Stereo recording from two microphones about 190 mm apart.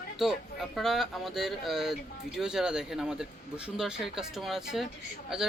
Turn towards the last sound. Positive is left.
turn(degrees=0)  # may be behind; listen again after turning